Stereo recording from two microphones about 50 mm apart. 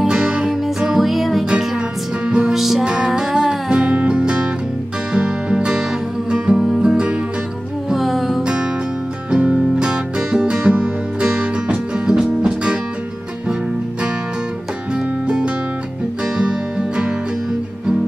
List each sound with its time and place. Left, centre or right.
0.1 s music: centre
2.2 s music: centre
2.8 s music: centre
7.9 s music: centre
9.3 s music: centre
15.2 s music: centre